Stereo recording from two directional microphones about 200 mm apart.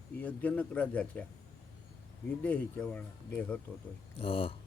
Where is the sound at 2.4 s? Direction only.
10° left (ahead or behind).